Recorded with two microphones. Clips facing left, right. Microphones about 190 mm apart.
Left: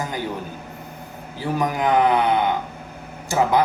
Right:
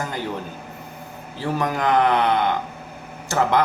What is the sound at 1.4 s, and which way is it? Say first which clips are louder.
Speech: left 1 dB; 15° left (ahead or behind).